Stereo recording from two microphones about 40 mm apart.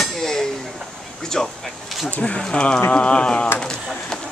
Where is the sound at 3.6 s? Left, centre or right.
Centre.